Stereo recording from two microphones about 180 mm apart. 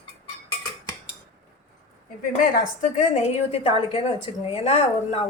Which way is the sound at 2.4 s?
50° left (ahead or behind).